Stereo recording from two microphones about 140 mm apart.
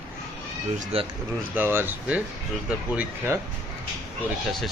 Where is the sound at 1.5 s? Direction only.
15° right (ahead or behind).